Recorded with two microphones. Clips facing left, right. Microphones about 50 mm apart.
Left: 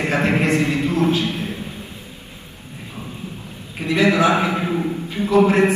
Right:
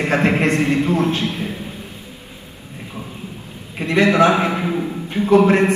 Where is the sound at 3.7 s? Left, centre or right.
Right.